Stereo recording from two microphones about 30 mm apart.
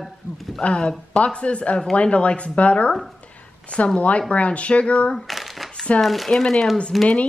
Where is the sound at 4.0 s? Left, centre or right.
Left.